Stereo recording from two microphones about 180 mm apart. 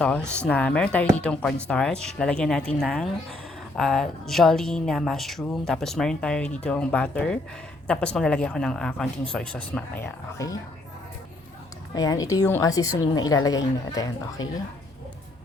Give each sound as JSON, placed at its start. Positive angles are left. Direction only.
{"t": 0.2, "sound": "speech", "side_deg": -15}
{"t": 0.4, "sound": "a woman's voice", "side_deg": 5}
{"t": 11.9, "sound": "a woman's voice", "side_deg": 20}